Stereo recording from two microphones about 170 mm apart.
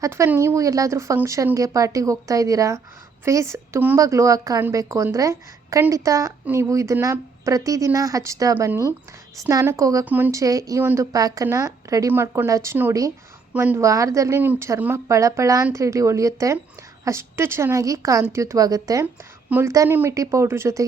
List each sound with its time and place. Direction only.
0.0 s speech: 15° right (ahead or behind)